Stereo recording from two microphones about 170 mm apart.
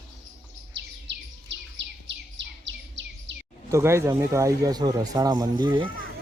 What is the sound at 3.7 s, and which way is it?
Speech, 15° right (ahead or behind).